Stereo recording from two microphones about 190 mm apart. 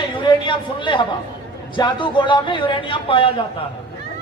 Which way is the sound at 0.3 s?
25° left (ahead or behind).